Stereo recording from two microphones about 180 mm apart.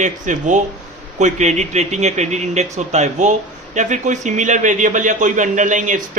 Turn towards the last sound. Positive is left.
turn(degrees=-45)  # may be behind; listen again after turning